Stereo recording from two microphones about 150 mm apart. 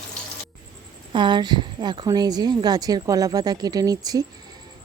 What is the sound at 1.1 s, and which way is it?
Speech, 30° right (ahead or behind).